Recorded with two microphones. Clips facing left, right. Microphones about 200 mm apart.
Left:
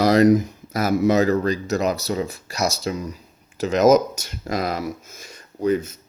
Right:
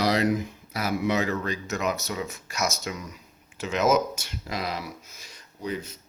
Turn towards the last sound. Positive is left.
turn(degrees=50)  # may be behind; listen again after turning